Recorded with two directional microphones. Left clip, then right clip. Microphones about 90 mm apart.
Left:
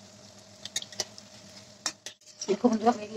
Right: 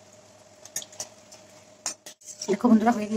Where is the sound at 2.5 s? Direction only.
30° right (ahead or behind).